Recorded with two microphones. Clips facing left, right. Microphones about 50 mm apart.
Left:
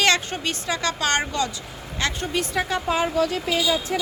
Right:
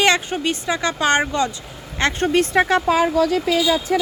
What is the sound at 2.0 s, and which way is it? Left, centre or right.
Speech, right.